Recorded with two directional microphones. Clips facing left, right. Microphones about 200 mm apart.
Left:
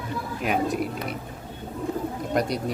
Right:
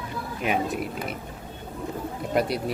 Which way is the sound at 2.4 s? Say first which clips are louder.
Right 1 dB; 5° right (ahead or behind).